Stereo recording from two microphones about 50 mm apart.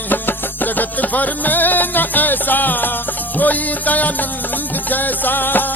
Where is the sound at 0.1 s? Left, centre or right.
Left.